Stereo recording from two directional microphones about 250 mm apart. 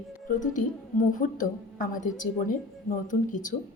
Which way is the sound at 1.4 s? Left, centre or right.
Left.